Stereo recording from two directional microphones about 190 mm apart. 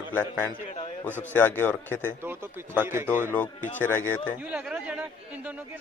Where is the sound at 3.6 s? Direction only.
40° left (ahead or behind).